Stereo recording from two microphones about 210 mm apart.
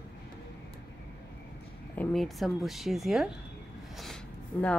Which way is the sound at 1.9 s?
5° left (ahead or behind).